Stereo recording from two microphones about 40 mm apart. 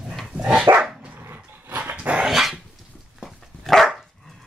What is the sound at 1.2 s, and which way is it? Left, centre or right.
Dog, right.